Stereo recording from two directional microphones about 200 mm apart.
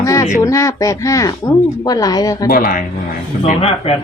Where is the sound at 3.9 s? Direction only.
30° left (ahead or behind).